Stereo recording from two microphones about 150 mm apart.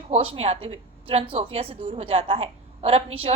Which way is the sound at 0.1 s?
40° right (ahead or behind).